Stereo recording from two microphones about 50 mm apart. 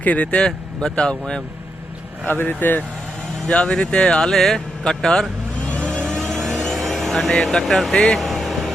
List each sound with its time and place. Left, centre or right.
0.0 s speech: left
0.4 s speech: centre
2.2 s speech: left
3.4 s speech: centre
5.6 s vehicle: left
6.1 s vehicle: centre
7.9 s speech: centre
8.2 s vehicle: centre